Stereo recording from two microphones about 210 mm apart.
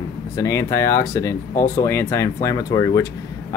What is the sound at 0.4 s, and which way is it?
Speech, 15° left (ahead or behind).